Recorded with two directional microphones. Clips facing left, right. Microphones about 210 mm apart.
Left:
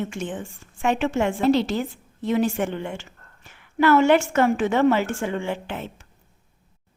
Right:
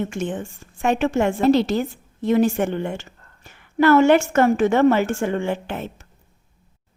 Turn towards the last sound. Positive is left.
turn(degrees=-45)  # may be behind; listen again after turning